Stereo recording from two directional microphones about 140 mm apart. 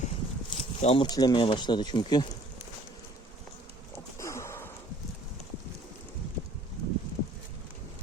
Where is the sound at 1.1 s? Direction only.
30° left (ahead or behind).